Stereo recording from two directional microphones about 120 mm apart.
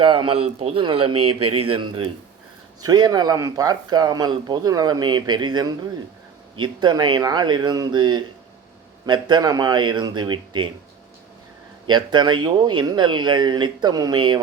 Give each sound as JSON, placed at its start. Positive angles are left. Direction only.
{"t": 0.0, "sound": "a man's voice", "side_deg": -45}
{"t": 11.9, "sound": "a man's voice", "side_deg": -40}